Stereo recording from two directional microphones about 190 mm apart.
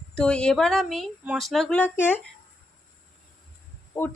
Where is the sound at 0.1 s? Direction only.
5° left (ahead or behind).